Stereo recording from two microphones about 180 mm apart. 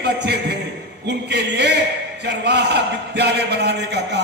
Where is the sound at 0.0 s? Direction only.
70° right (ahead or behind).